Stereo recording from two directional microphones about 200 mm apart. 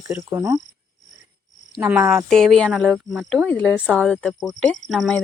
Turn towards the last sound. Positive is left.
turn(degrees=0)  # may be behind; listen again after turning